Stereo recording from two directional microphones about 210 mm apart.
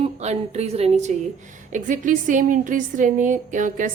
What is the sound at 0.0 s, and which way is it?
A woman's voice, 30° right (ahead or behind).